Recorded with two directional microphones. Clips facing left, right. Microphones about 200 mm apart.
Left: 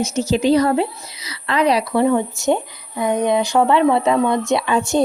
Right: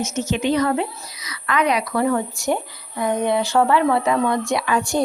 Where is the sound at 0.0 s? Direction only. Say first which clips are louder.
Left 4 dB; 35° left (ahead or behind).